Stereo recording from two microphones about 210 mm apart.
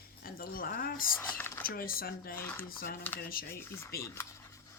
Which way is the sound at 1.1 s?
10° left (ahead or behind).